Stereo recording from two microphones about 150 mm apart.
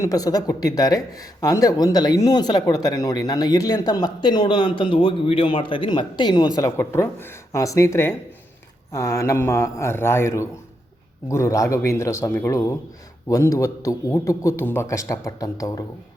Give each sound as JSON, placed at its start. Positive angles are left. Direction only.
{"t": 0.0, "sound": "speech", "side_deg": 25}